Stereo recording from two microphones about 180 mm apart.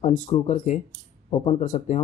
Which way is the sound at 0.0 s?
40° left (ahead or behind).